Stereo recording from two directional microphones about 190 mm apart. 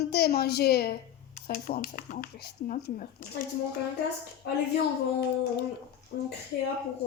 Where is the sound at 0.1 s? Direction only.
55° left (ahead or behind).